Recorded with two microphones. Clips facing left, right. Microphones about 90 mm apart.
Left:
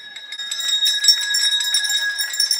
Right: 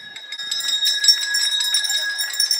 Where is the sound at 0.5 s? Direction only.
35° left (ahead or behind).